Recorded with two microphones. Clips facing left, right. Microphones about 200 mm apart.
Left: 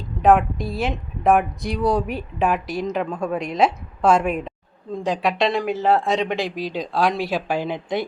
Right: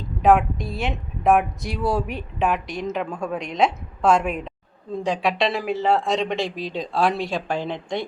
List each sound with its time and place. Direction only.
0.2 s speech: centre (ahead or behind)